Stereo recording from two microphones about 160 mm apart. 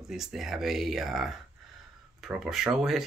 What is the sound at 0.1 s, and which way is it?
Speech, centre (ahead or behind).